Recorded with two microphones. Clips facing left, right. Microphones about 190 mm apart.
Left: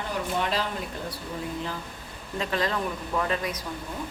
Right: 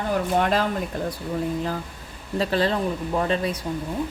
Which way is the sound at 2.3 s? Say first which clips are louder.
Right 5 dB; 30° right (ahead or behind).